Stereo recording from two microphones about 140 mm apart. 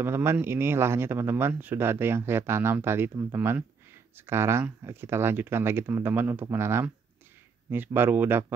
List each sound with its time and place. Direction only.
0.0 s speech: 15° right (ahead or behind)